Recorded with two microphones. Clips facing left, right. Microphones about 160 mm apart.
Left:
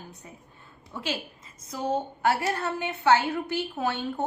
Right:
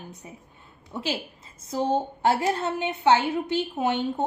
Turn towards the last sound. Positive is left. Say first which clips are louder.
# right 4 dB
turn(degrees=-20)  # may be behind; listen again after turning